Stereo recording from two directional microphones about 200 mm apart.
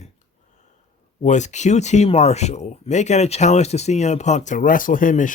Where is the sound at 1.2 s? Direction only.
35° left (ahead or behind).